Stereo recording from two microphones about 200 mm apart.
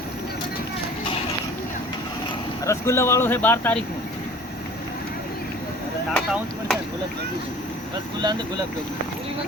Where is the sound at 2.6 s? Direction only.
15° left (ahead or behind).